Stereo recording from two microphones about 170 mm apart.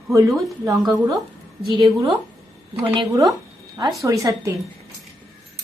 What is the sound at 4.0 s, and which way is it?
Speech, 20° right (ahead or behind).